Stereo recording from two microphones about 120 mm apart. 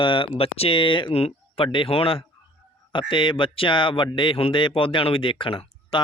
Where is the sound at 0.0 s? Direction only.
45° left (ahead or behind).